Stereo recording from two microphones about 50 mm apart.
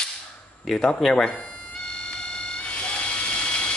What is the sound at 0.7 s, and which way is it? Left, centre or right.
Speech, centre.